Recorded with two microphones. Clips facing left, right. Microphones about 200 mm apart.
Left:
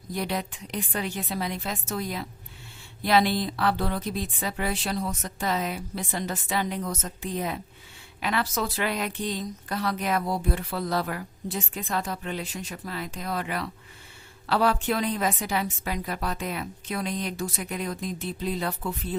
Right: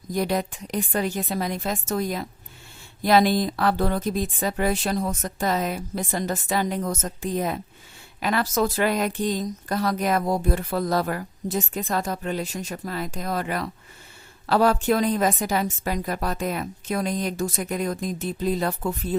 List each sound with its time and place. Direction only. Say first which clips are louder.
0.1 s speech: right 5 dB; 45° right (ahead or behind)